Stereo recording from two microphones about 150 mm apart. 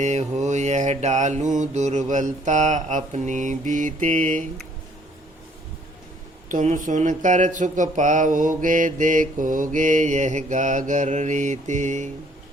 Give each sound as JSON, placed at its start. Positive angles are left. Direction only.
{"t": 0.0, "sound": "mantra", "side_deg": -50}
{"t": 6.5, "sound": "speech", "side_deg": -60}